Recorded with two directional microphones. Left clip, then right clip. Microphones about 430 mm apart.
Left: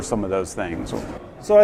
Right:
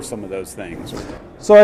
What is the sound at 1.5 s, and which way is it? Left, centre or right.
Speech, right.